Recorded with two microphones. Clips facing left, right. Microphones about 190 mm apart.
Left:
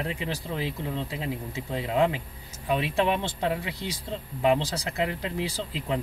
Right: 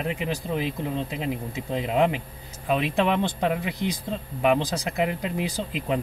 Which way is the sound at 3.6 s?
20° right (ahead or behind).